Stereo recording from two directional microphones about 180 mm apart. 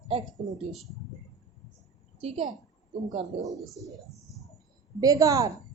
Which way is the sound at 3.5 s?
Centre (ahead or behind).